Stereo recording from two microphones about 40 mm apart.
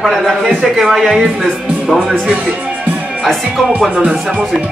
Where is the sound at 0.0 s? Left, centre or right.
Centre.